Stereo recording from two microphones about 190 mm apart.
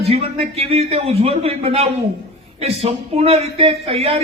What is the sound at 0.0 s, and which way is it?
Speech, 30° right (ahead or behind).